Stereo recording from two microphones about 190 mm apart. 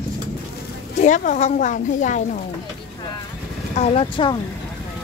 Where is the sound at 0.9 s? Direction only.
40° left (ahead or behind).